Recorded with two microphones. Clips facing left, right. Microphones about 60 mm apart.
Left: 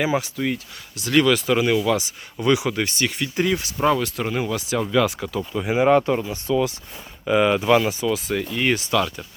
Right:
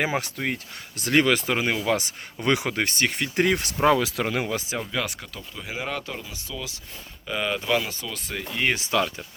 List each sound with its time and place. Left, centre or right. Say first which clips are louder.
0.0 s speech: left 4 dB; right
4.9 s speech: left 9 dB; centre
5.5 s speech: left 14 dB; left
7.3 s speech: left 8 dB; centre
8.1 s speech: left 10 dB; centre
8.7 s speech: left 3 dB; right